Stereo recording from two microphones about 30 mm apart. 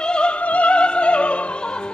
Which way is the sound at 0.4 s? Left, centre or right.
Left.